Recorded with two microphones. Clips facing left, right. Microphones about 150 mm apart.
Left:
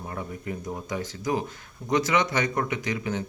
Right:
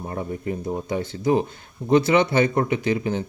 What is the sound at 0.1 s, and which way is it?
Speech, 30° right (ahead or behind).